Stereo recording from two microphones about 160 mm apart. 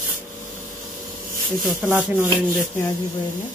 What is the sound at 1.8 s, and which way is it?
Rub, 10° right (ahead or behind).